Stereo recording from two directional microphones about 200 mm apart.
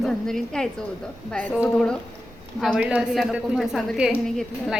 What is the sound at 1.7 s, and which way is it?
A woman's voice, 5° left (ahead or behind).